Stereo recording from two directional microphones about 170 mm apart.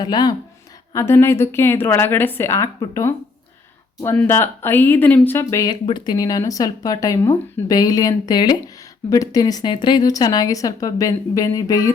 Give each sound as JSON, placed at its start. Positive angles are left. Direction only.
{"t": 0.0, "sound": "a woman's voice", "side_deg": 25}